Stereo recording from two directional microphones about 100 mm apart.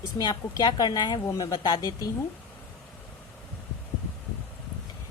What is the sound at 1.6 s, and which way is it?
Speech, 45° left (ahead or behind).